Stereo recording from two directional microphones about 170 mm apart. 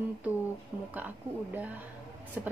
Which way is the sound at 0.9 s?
10° right (ahead or behind).